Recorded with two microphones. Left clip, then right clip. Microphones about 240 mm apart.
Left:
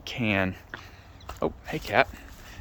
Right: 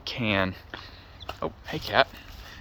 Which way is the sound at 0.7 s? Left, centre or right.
Right.